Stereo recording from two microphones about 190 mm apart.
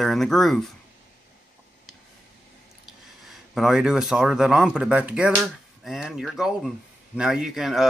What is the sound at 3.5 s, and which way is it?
Speech, 5° right (ahead or behind).